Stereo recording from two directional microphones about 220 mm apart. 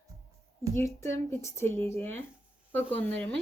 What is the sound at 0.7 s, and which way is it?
Speech, 10° left (ahead or behind).